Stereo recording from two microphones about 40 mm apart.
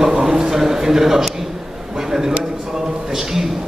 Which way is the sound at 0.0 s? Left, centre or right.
Centre.